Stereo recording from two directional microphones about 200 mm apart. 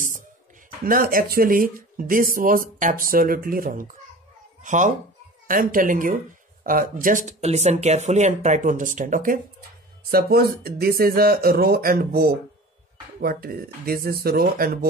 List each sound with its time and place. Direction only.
0.8 s speech: 45° right (ahead or behind)